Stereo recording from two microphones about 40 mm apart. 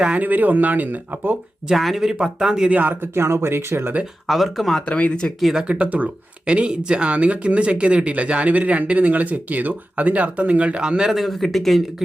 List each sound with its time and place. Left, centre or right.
0.2 s speech: right
1.7 s speech: centre
2.0 s speech: centre
2.8 s speech: right
4.3 s speech: centre
5.2 s speech: left
5.5 s speech: right
6.4 s speech: right
10.8 s a man's voice: right
11.1 s speech: centre